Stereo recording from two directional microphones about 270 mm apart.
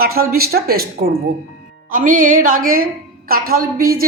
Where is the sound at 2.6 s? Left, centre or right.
Right.